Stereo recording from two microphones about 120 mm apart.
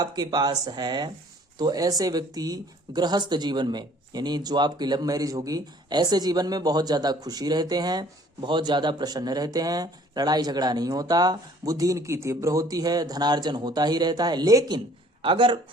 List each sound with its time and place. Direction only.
0.0 s speech: 35° right (ahead or behind)
15.2 s speech: 45° right (ahead or behind)